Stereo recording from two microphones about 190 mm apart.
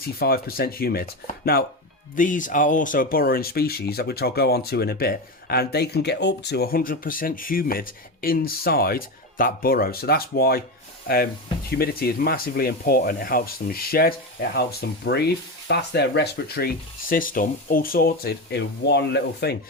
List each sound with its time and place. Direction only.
0.2 s speech: 55° left (ahead or behind)
11.7 s speech: 55° left (ahead or behind)